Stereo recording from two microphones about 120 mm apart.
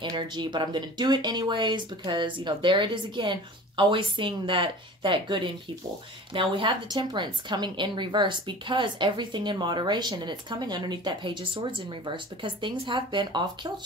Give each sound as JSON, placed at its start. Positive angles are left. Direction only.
{"t": 0.0, "sound": "a woman's voice", "side_deg": -40}